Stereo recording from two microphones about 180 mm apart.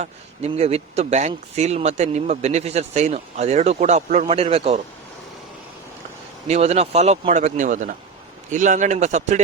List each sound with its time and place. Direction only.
0.0 s speech: 35° right (ahead or behind)
6.5 s speech: 35° right (ahead or behind)